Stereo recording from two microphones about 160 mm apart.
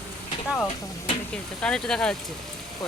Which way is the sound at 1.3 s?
5° left (ahead or behind).